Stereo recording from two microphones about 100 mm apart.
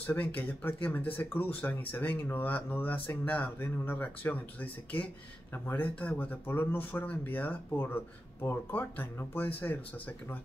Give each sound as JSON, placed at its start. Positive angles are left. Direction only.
{"t": 0.0, "sound": "speech", "side_deg": 20}